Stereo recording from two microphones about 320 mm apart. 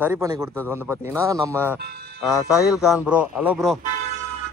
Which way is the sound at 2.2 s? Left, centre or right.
Centre.